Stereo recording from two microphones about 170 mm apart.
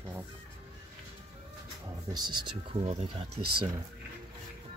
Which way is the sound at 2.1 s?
25° right (ahead or behind).